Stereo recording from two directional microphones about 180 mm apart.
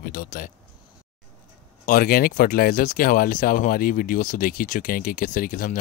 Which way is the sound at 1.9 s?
55° left (ahead or behind).